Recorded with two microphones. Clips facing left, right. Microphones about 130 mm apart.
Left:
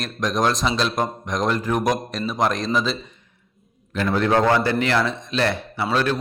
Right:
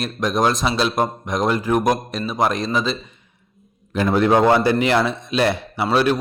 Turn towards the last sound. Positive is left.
turn(degrees=-10)  # may be behind; listen again after turning